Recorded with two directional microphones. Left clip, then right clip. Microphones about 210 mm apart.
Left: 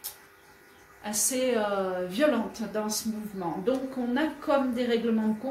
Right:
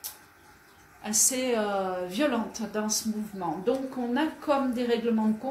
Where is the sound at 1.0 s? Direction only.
30° right (ahead or behind).